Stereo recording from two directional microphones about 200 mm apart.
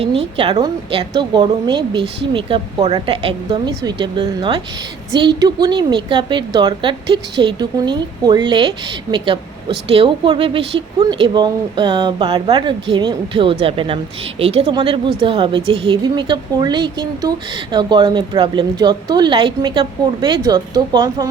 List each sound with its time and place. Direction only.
0.3 s a woman's voice: 25° right (ahead or behind)